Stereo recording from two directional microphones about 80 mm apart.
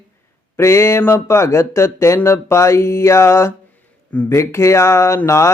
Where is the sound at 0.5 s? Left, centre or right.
Left.